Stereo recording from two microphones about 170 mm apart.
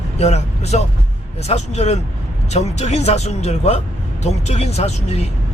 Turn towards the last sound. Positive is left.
turn(degrees=40)  # may be behind; listen again after turning